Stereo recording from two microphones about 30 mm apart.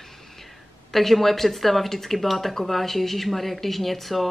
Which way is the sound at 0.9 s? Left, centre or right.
Centre.